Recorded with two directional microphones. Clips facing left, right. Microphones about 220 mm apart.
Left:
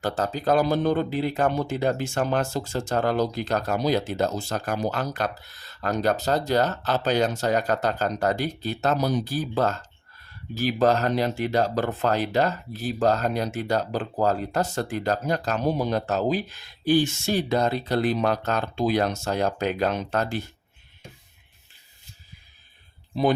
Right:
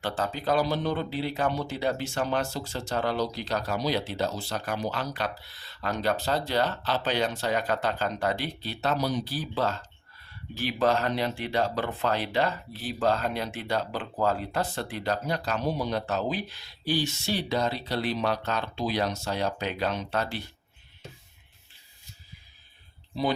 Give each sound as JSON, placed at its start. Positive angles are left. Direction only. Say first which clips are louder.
{"t": 0.0, "sound": "speech", "louder": "left 4 dB", "side_deg": 40}